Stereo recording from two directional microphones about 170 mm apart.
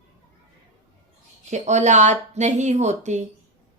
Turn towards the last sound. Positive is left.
turn(degrees=-45)  # may be behind; listen again after turning